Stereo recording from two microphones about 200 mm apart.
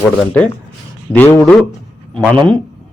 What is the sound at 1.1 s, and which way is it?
Speech, 10° left (ahead or behind).